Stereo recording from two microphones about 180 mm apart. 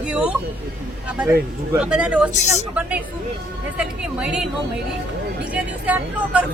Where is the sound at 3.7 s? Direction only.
5° right (ahead or behind).